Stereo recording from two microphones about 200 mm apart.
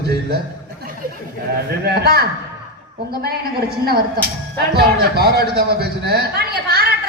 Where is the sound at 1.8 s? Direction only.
50° right (ahead or behind).